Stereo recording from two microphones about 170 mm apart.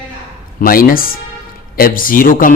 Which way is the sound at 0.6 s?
60° left (ahead or behind).